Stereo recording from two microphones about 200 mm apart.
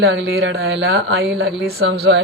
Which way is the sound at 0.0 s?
55° right (ahead or behind).